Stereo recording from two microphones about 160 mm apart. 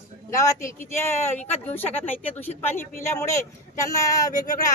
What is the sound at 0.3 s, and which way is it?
Speech, 20° left (ahead or behind).